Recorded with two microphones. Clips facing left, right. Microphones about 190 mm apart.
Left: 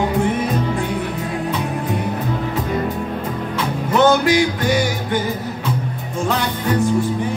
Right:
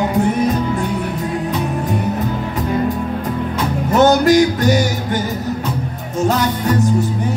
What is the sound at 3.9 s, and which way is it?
Music, 40° right (ahead or behind).